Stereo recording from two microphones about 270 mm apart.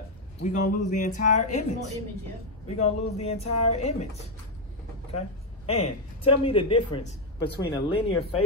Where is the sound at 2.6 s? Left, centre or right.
Left.